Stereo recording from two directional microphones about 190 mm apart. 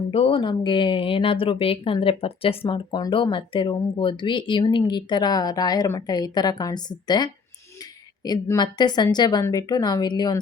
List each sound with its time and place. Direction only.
0.1 s speech: 30° left (ahead or behind)